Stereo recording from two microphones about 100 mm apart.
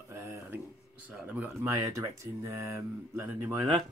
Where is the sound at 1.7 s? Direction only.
30° right (ahead or behind).